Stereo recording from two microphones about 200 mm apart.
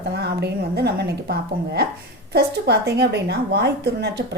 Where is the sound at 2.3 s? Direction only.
55° right (ahead or behind).